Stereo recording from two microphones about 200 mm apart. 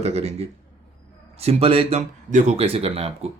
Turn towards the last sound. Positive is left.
turn(degrees=-30)  # may be behind; listen again after turning